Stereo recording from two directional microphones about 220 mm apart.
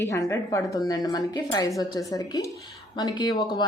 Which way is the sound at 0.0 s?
15° left (ahead or behind).